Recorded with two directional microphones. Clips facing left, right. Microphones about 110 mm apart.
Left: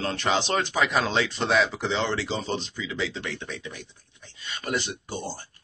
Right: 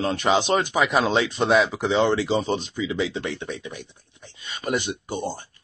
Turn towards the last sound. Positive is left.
turn(degrees=-20)  # may be behind; listen again after turning